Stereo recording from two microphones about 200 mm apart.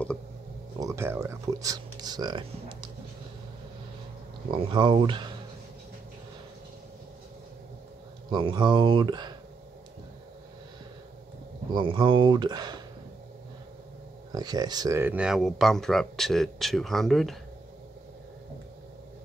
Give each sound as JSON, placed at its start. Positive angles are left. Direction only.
{"t": 0.7, "sound": "speech", "side_deg": -15}
{"t": 4.6, "sound": "speech", "side_deg": -25}
{"t": 8.3, "sound": "speech", "side_deg": -25}
{"t": 11.7, "sound": "speech", "side_deg": -25}
{"t": 14.3, "sound": "speech", "side_deg": -20}